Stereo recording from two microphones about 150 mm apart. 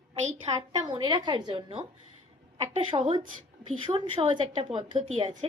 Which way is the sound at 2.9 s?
30° right (ahead or behind).